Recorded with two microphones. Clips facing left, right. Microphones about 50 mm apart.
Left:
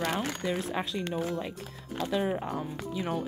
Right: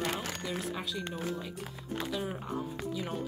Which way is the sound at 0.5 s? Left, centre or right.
Left.